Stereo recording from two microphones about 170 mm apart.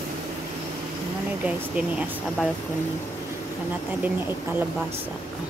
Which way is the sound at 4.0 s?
10° right (ahead or behind).